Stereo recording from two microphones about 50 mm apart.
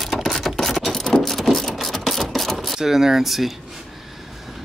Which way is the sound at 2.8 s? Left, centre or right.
Centre.